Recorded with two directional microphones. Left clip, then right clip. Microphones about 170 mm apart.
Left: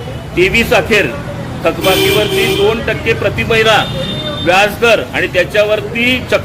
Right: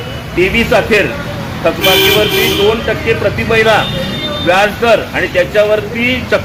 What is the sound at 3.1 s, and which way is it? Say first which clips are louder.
A man's voice: even; 30° left (ahead or behind).